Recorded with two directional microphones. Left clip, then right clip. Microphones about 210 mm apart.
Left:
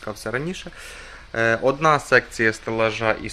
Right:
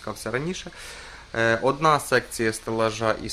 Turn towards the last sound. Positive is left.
turn(degrees=-10)  # may be behind; listen again after turning